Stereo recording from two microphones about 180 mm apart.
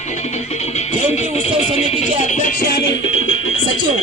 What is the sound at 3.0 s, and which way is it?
Music, 90° left.